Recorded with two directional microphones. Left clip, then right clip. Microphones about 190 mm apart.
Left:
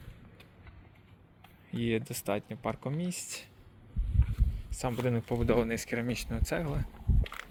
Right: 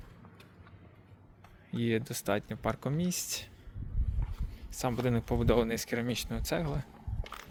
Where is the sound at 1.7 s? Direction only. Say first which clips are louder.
Even; centre (ahead or behind); by 3.2 s 15° right (ahead or behind).